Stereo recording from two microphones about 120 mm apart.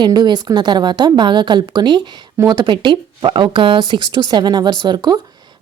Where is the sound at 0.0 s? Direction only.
35° right (ahead or behind).